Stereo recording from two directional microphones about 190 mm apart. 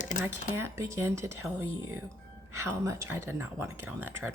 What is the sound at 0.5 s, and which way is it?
Speech, 15° right (ahead or behind).